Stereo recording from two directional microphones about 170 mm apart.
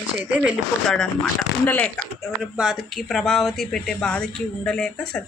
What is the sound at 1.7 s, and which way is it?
Speech, 10° left (ahead or behind).